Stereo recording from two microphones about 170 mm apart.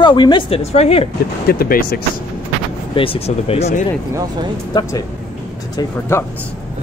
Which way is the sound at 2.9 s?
35° left (ahead or behind).